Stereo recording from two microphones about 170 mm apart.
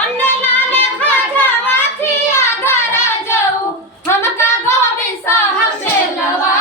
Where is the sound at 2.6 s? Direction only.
15° left (ahead or behind).